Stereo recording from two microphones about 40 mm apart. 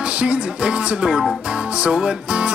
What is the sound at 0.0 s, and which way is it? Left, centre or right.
Music, right.